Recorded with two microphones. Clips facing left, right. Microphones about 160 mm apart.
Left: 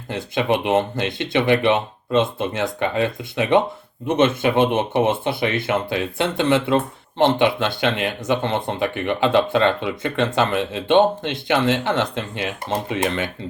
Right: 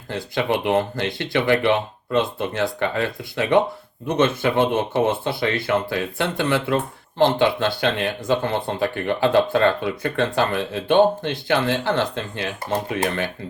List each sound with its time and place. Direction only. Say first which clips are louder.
0.1 s speech: left 2 dB; 20° left (ahead or behind)